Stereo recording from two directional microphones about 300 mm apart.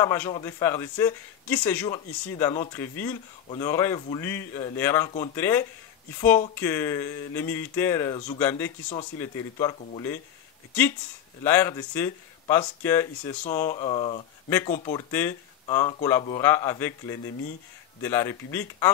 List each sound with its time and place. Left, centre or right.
0.0 s a man's voice: centre
11.4 s a man's voice: centre
13.4 s a man's voice: left